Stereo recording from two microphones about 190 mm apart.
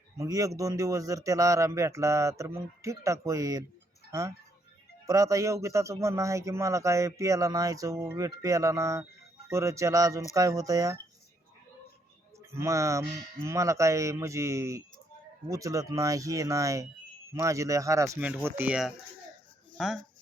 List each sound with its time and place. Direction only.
0.2 s speech: 15° right (ahead or behind)
12.4 s speech: 15° right (ahead or behind)